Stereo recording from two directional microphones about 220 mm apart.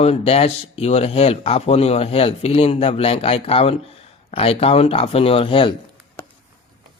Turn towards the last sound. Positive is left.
turn(degrees=25)  # may be behind; listen again after turning